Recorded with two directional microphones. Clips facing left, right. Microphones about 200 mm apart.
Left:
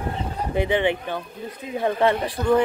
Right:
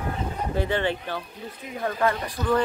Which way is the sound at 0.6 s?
15° left (ahead or behind).